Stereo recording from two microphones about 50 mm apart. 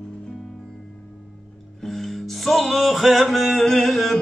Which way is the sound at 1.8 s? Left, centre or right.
Centre.